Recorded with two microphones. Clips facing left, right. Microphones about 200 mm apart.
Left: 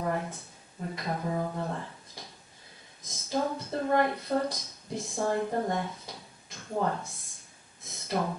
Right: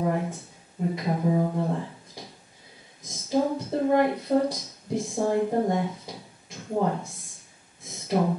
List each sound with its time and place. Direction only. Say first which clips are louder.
0.0 s speech: right 5 dB; 10° right (ahead or behind)
3.3 s speech: right 6 dB; 10° right (ahead or behind)
8.1 s speech: right 6 dB; 15° right (ahead or behind)